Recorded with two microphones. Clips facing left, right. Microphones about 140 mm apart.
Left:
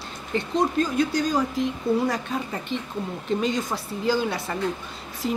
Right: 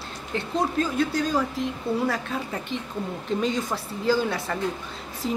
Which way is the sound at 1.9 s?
25° right (ahead or behind).